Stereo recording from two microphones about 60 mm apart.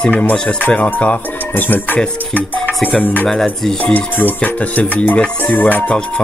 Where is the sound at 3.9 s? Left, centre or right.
Left.